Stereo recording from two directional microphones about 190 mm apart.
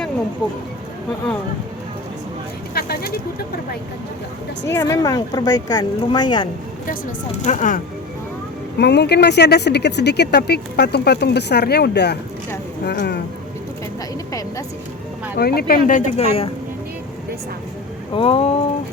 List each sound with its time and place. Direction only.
2.7 s a sound: 55° left (ahead or behind)
4.7 s speech: 15° left (ahead or behind)
7.4 s speech: 40° left (ahead or behind)
8.8 s speech: 60° left (ahead or behind)
15.4 s speech: 55° left (ahead or behind); by 16.5 s 30° left (ahead or behind)
18.1 s speech: 30° left (ahead or behind)